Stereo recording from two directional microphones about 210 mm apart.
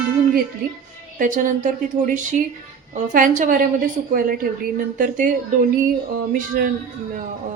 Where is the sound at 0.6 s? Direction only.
45° right (ahead or behind).